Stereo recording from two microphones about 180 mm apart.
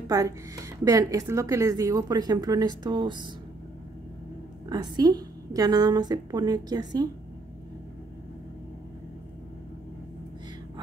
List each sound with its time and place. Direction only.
0.1 s a woman's voice: 20° right (ahead or behind)
4.6 s a woman's voice: 20° right (ahead or behind)